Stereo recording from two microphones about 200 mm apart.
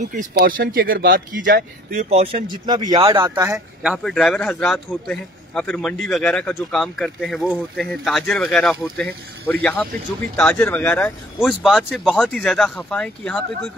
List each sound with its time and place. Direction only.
0.0 s speech: 40° right (ahead or behind)
1.9 s speech: 35° right (ahead or behind); by 3.5 s 15° right (ahead or behind)
3.5 s speech: 5° right (ahead or behind)